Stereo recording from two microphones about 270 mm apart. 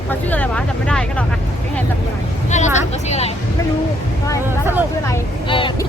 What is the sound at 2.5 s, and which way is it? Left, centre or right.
Speech, left.